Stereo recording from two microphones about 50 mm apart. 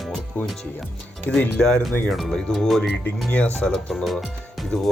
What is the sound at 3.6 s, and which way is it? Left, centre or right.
Speech, centre.